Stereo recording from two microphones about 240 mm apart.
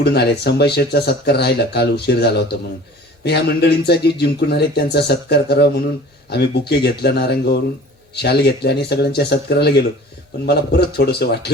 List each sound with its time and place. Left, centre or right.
0.0 s speech: left